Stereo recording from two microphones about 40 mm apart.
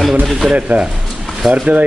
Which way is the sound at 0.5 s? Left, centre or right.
Right.